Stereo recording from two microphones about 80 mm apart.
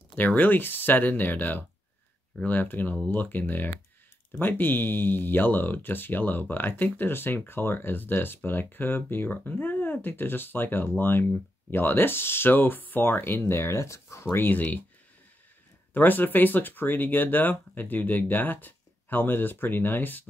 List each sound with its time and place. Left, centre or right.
0.1 s speech: centre; by 14.2 s left
14.2 s speech: left
15.9 s speech: left